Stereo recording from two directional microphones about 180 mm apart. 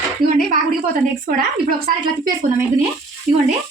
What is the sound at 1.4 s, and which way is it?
Speech, 50° right (ahead or behind).